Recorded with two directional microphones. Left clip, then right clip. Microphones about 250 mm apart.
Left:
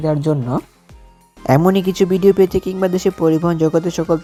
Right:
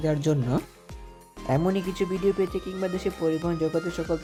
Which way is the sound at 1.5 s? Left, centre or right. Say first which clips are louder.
Left 12 dB; left.